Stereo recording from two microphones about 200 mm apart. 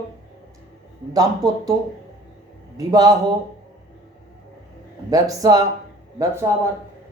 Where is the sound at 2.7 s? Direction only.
20° right (ahead or behind).